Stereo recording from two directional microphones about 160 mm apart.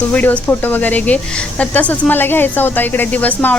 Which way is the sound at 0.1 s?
10° left (ahead or behind).